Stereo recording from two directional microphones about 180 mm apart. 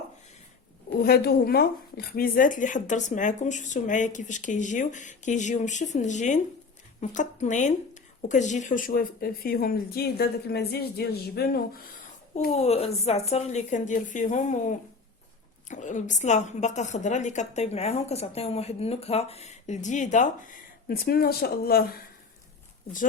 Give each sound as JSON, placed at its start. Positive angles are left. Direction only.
{"t": 0.9, "sound": "a woman's voice", "side_deg": 60}
{"t": 12.5, "sound": "a woman's voice", "side_deg": 35}
{"t": 15.7, "sound": "a woman's voice", "side_deg": 45}